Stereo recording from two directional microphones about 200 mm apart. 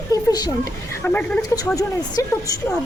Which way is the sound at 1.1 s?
5° left (ahead or behind).